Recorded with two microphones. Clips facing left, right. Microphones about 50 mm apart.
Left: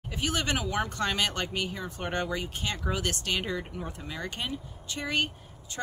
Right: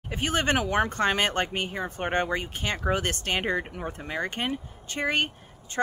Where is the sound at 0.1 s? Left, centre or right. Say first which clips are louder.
Right 5 dB; right.